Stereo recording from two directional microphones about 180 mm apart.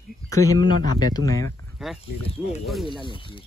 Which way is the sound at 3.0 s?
30° left (ahead or behind).